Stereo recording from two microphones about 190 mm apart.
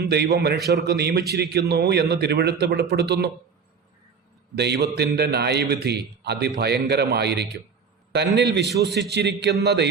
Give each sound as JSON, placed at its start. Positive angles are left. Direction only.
{"t": 0.0, "sound": "speech", "side_deg": -60}
{"t": 4.5, "sound": "speech", "side_deg": -60}